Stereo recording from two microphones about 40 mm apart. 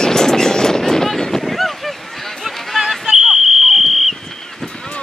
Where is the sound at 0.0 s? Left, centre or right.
Centre.